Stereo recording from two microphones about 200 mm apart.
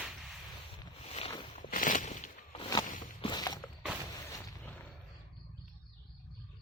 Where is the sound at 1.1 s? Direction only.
30° left (ahead or behind).